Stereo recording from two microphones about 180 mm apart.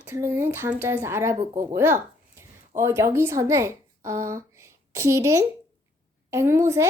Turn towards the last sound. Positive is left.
turn(degrees=-15)  # may be behind; listen again after turning